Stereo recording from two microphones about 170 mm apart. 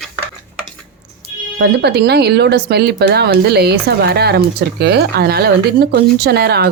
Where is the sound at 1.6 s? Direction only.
75° right (ahead or behind).